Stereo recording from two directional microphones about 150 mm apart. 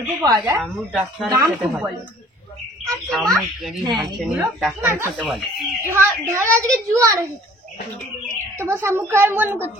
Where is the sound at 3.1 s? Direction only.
Centre (ahead or behind).